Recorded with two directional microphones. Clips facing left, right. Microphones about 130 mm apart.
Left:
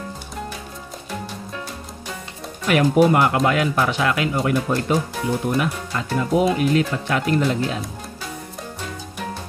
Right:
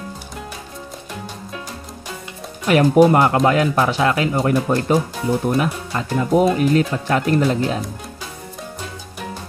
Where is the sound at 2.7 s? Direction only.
35° right (ahead or behind).